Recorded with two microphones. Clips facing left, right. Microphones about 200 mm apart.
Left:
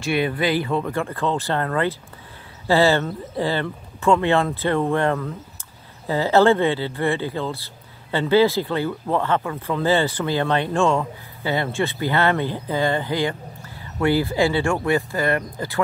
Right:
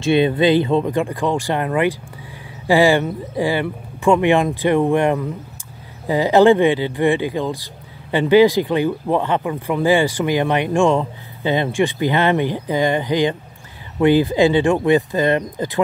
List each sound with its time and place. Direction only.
0.0 s speech: 25° right (ahead or behind)